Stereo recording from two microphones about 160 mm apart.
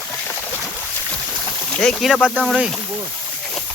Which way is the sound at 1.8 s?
Centre (ahead or behind).